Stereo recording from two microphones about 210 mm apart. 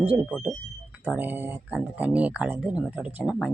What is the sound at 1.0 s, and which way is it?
Speech, 10° right (ahead or behind).